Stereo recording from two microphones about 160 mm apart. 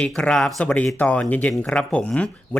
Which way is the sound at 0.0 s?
5° left (ahead or behind).